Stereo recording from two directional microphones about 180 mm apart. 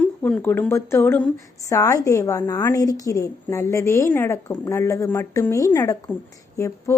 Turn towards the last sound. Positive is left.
turn(degrees=15)  # may be behind; listen again after turning